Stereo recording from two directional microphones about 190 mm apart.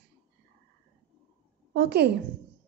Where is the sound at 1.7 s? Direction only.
60° right (ahead or behind).